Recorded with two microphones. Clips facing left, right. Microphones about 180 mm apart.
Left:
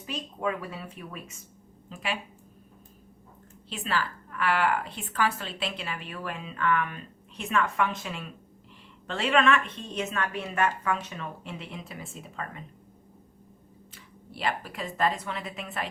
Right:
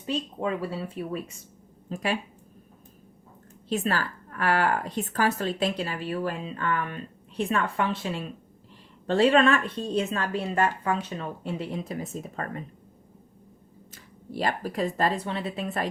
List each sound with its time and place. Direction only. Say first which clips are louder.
0.0 s speech: right 3 dB; 30° right (ahead or behind)
3.7 s speech: right 4 dB; 40° right (ahead or behind)
13.9 s speech: right 11 dB; 40° right (ahead or behind)